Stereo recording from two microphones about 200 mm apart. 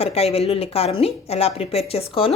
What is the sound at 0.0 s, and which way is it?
A woman's voice, 30° left (ahead or behind).